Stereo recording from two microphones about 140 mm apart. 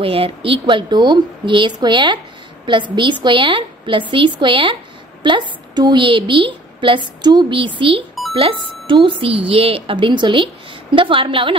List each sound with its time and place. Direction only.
0.0 s a woman's voice: 40° right (ahead or behind)